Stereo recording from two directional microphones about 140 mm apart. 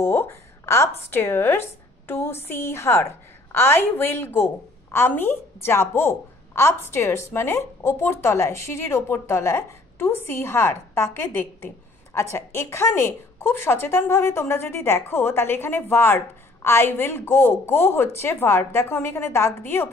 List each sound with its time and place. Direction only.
0.0 s a woman's voice: 20° left (ahead or behind)